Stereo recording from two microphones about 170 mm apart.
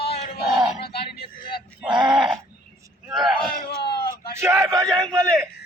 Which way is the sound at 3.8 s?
65° left (ahead or behind).